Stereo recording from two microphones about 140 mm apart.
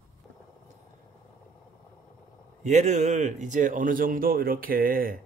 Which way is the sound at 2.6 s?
60° right (ahead or behind).